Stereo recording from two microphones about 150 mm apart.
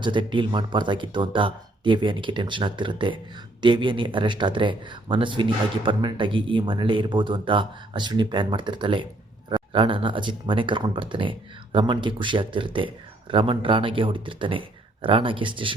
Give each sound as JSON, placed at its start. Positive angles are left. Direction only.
{"t": 0.0, "sound": "speech", "side_deg": -30}